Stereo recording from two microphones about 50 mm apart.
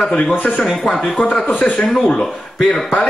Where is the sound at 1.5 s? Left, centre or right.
Left.